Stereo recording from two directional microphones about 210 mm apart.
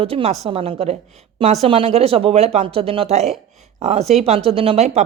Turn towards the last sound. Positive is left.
turn(degrees=-30)  # may be behind; listen again after turning